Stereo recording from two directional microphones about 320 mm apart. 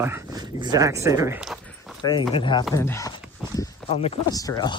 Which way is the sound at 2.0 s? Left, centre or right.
Centre.